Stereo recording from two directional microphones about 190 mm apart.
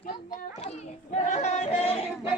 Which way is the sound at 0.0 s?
45° left (ahead or behind).